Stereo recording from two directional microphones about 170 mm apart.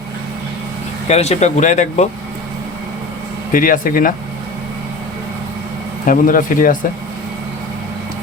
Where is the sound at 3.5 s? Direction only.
55° left (ahead or behind).